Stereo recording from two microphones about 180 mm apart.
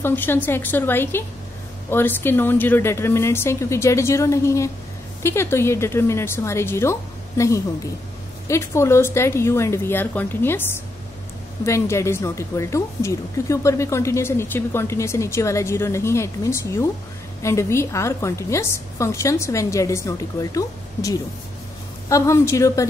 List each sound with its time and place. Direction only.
0.0 s a woman's voice: 10° left (ahead or behind)
11.6 s a woman's voice: 15° left (ahead or behind)